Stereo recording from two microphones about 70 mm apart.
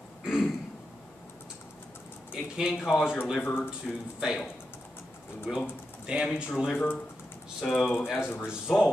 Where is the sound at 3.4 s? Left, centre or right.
Left.